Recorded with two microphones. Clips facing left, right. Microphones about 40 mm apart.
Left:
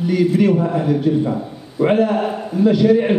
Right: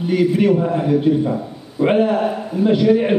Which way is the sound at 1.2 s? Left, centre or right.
Centre.